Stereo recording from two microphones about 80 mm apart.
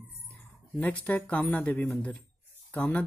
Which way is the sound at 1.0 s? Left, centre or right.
Centre.